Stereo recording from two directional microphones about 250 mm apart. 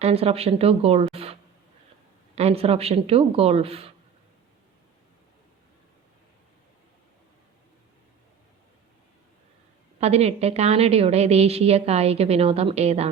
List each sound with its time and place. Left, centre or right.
0.0 s a woman's voice: right
10.0 s a woman's voice: right